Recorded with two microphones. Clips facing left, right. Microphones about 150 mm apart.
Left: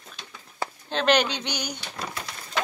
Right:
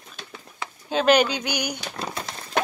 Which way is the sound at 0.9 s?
5° right (ahead or behind).